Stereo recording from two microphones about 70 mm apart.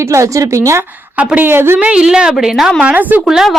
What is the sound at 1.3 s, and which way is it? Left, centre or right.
Speech, right.